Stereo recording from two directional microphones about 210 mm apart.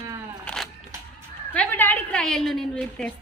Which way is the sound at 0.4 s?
Centre (ahead or behind).